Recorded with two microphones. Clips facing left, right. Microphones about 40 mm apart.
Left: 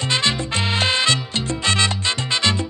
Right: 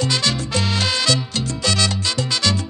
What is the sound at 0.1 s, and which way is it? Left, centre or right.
Salsa music, left.